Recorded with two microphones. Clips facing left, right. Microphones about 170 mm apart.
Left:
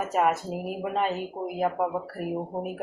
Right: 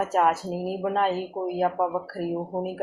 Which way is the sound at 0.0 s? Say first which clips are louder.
Right 2 dB; centre (ahead or behind).